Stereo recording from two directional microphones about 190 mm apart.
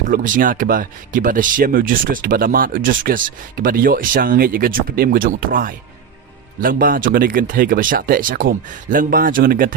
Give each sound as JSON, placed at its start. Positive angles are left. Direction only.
{"t": 0.1, "sound": "speech", "side_deg": -45}